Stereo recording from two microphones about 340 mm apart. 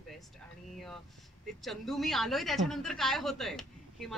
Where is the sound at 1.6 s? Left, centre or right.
Centre.